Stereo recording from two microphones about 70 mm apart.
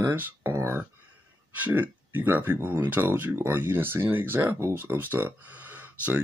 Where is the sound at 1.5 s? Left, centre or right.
Right.